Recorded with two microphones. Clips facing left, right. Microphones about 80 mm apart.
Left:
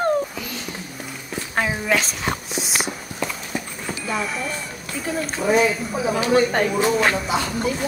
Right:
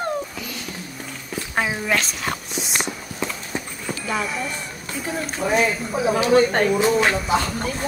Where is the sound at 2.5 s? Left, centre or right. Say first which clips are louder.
Left 1 dB; centre.